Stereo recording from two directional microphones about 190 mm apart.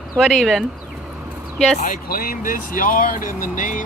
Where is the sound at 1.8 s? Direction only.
45° left (ahead or behind).